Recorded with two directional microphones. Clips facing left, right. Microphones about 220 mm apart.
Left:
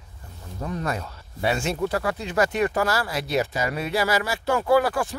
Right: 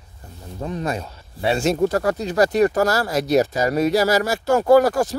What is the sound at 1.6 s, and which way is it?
Speech, 40° right (ahead or behind).